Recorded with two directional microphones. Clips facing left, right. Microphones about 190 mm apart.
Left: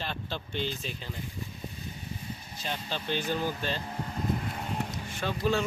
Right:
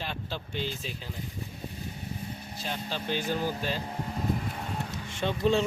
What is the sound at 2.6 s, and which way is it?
Speech, 5° right (ahead or behind).